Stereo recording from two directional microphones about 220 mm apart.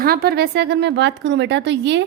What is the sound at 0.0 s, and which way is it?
A woman's voice, 45° right (ahead or behind).